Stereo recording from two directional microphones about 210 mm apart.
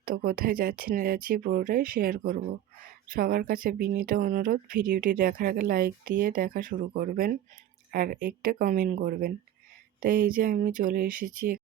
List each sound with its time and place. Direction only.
0.0 s speech: 45° right (ahead or behind)